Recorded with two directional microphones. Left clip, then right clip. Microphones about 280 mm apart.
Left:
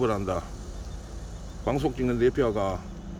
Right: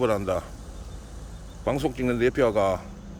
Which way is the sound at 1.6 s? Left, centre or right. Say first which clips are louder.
Right 1 dB; centre.